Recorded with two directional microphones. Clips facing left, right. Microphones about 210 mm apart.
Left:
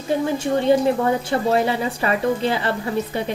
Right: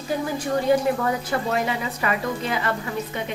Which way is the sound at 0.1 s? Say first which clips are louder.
Left 4 dB; 25° left (ahead or behind).